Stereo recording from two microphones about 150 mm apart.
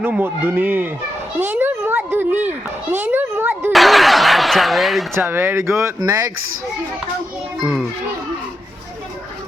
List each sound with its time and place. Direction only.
0.0 s a child's voice: 15° right (ahead or behind)
3.7 s speech: centre (ahead or behind)
5.1 s a child's voice: 15° right (ahead or behind)
7.6 s speech: centre (ahead or behind)